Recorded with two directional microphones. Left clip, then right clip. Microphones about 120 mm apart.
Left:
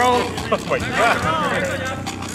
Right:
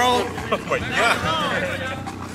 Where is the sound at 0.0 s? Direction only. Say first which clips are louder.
Left 2 dB; 45° right (ahead or behind).